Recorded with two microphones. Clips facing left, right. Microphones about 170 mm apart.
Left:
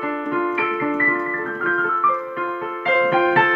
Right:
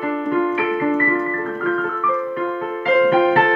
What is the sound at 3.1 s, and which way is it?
Music, 35° right (ahead or behind).